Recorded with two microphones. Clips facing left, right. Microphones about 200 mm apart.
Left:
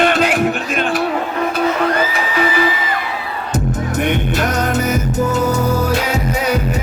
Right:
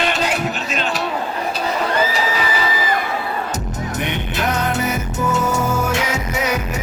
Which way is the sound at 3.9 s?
50° left (ahead or behind).